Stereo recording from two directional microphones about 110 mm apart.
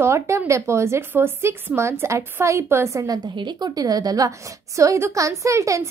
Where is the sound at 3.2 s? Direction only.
45° right (ahead or behind).